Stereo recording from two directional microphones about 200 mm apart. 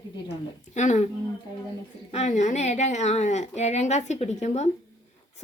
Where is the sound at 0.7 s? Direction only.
35° left (ahead or behind).